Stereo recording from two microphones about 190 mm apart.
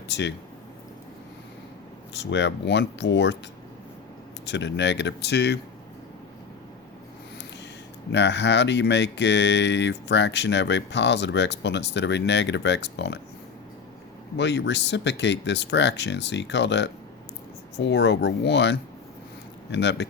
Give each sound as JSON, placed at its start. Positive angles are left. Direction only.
{"t": 0.1, "sound": "speech", "side_deg": 65}
{"t": 2.1, "sound": "speech", "side_deg": 70}
{"t": 4.4, "sound": "speech", "side_deg": 70}
{"t": 8.1, "sound": "speech", "side_deg": 65}
{"t": 14.3, "sound": "speech", "side_deg": 65}